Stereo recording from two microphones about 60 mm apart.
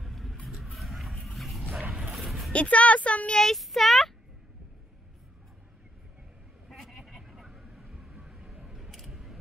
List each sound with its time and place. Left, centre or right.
0.0 s vehicle: centre
1.2 s wild animals: centre
1.8 s dog: centre
2.1 s a sound: centre
2.5 s a sound: left
3.3 s child singing: centre
6.7 s vehicle: centre
8.6 s scissors: centre